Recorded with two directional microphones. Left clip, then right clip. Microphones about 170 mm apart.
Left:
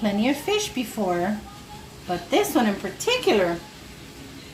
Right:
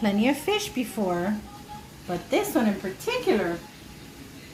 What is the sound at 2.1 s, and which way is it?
Speech, 10° right (ahead or behind).